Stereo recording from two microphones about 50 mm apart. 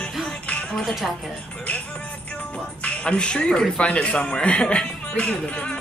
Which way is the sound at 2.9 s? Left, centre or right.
Left.